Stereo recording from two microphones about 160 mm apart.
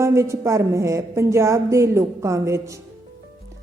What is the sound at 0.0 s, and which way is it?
A woman's voice, 15° right (ahead or behind).